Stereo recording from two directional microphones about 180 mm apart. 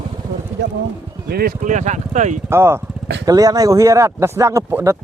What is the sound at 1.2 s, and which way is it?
Speech, 60° right (ahead or behind).